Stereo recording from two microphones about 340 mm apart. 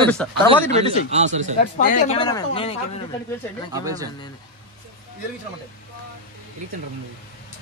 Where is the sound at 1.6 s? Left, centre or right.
Left.